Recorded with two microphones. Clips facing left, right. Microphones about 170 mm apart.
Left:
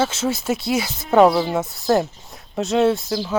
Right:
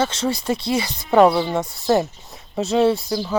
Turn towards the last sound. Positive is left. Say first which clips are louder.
# even
turn(degrees=5)  # may be behind; listen again after turning